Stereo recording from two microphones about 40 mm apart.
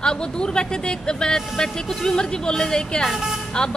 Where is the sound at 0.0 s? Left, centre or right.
Centre.